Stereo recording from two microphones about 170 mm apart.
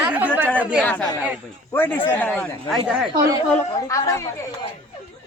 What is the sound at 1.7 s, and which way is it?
Speech, 10° left (ahead or behind).